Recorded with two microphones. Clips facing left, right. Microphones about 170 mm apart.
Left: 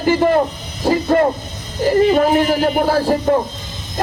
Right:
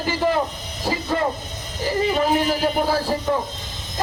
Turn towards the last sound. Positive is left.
turn(degrees=55)  # may be behind; listen again after turning